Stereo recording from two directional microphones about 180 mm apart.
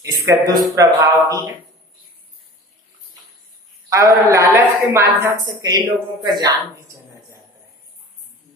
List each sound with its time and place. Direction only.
0.0 s a woman's voice: 15° right (ahead or behind)
3.9 s a woman's voice: 15° right (ahead or behind)